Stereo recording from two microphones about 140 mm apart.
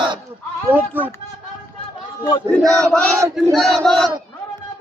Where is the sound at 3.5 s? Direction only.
Centre (ahead or behind).